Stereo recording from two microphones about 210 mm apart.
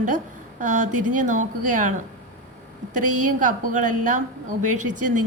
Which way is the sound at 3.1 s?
90° right.